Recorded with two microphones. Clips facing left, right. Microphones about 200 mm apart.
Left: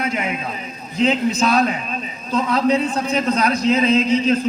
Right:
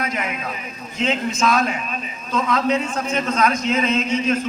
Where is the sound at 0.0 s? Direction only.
30° left (ahead or behind).